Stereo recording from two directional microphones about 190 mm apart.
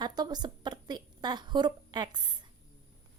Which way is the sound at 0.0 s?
20° right (ahead or behind).